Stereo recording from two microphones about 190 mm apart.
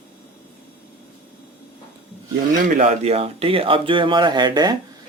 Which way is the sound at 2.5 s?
35° right (ahead or behind).